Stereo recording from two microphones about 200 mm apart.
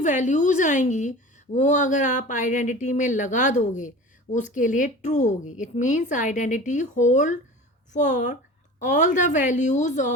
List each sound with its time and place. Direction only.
0.0 s a woman's voice: 40° left (ahead or behind)